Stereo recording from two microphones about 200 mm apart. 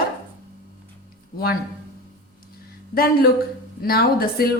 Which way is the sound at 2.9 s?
50° left (ahead or behind).